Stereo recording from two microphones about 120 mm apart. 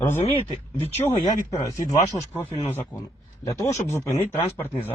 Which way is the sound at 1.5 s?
25° left (ahead or behind).